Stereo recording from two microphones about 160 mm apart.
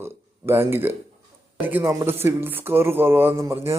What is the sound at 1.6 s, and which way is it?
A man's voice, 15° right (ahead or behind).